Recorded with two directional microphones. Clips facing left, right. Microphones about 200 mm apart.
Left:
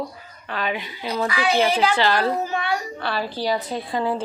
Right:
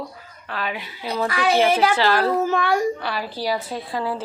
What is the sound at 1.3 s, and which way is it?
Speech, 50° right (ahead or behind).